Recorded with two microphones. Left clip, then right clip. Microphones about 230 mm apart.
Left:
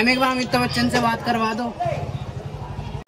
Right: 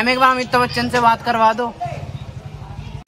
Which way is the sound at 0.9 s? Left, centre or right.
Centre.